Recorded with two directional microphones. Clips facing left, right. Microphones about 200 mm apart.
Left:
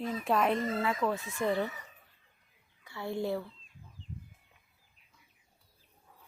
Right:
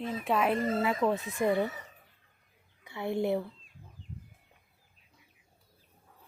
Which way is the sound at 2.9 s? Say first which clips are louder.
Right 4 dB; 20° right (ahead or behind).